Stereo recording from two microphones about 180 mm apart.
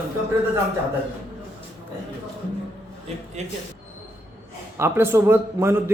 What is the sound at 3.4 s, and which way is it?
Speech, 40° right (ahead or behind).